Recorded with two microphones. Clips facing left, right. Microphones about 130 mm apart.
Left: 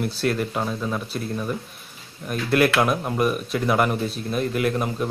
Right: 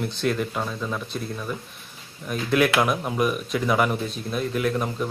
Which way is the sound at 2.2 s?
Centre (ahead or behind).